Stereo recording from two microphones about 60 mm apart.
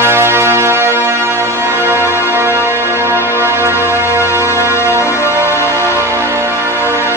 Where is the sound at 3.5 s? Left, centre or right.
Right.